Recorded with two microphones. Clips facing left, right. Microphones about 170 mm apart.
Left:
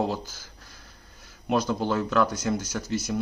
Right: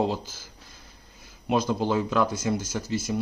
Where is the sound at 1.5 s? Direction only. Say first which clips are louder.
Right 1 dB; 10° right (ahead or behind).